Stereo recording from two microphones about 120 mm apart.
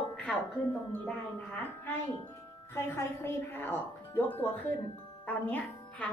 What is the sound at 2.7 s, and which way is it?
A woman's voice, 20° left (ahead or behind).